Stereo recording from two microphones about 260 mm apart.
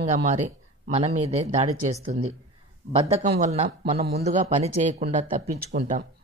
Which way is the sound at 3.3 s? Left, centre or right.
Right.